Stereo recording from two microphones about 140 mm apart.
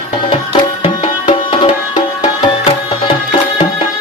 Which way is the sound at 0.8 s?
35° left (ahead or behind).